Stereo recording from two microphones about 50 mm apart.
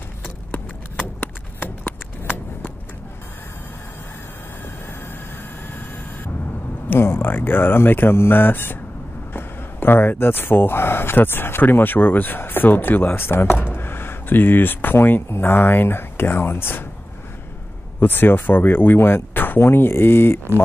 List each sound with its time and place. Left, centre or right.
0.5 s clip-clop: left
7.0 s speech: left
13.6 s a sound: left
15.4 s speech: left
18.0 s speech: left